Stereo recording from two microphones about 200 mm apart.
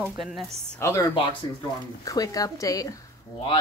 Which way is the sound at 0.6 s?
15° left (ahead or behind).